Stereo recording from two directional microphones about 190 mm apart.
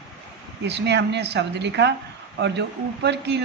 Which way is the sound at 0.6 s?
65° right (ahead or behind).